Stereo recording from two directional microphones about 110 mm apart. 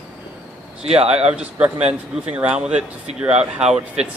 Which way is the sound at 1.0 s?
75° right (ahead or behind).